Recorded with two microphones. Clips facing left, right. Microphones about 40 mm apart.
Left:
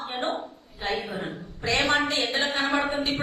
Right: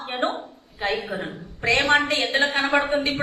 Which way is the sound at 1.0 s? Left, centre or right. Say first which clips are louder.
Right 3 dB; right.